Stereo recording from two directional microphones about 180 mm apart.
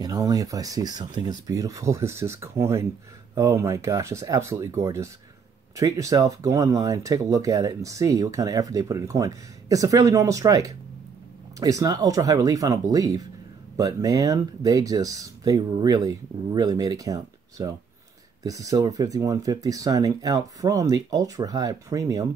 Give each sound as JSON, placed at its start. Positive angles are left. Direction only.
{"t": 0.0, "sound": "speech", "side_deg": -20}